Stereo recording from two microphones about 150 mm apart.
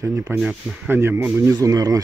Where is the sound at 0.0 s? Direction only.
20° right (ahead or behind).